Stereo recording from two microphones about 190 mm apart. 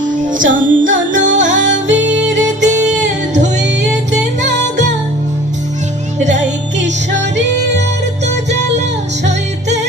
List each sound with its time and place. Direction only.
0.5 s music: 45° right (ahead or behind)
1.2 s music: 75° right (ahead or behind)
3.0 s music: 40° right (ahead or behind)
3.7 s music: 65° right (ahead or behind)
6.7 s music: 70° right (ahead or behind)